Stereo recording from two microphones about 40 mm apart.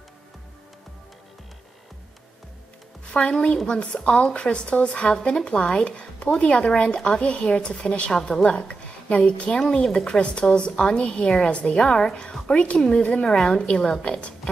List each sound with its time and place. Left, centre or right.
3.1 s a woman's voice: left
11.8 s a woman's voice: centre
12.7 s a woman's voice: centre
13.0 s a woman's voice: left
13.3 s a woman's voice: centre